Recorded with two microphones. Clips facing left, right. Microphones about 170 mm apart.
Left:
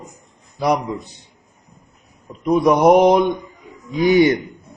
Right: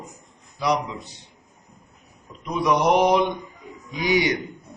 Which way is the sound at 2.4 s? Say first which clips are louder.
Left 8 dB; 50° left (ahead or behind).